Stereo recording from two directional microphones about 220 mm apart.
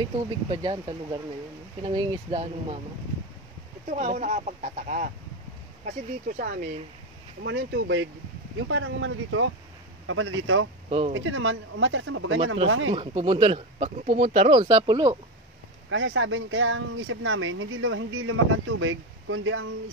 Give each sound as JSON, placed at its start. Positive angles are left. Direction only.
{"t": 0.5, "sound": "speech", "side_deg": -20}
{"t": 3.9, "sound": "speech", "side_deg": -35}
{"t": 6.2, "sound": "speech", "side_deg": -40}
{"t": 7.4, "sound": "speech", "side_deg": -55}
{"t": 10.9, "sound": "speech", "side_deg": -25}
{"t": 11.1, "sound": "speech", "side_deg": -60}
{"t": 12.9, "sound": "speech", "side_deg": -25}
{"t": 15.9, "sound": "speech", "side_deg": -60}